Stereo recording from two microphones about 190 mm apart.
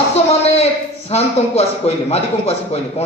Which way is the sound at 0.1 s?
35° left (ahead or behind).